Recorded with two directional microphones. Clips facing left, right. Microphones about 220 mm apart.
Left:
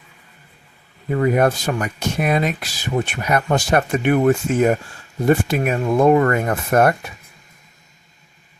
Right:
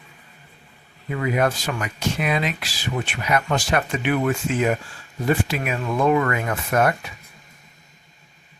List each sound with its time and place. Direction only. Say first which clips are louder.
1.1 s speech: left 5 dB; 45° left (ahead or behind)